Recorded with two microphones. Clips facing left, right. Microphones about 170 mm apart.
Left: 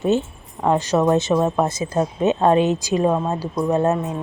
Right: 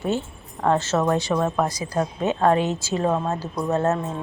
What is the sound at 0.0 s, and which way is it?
Speech, 20° left (ahead or behind).